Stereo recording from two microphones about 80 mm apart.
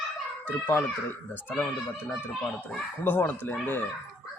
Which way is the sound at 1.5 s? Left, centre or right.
Centre.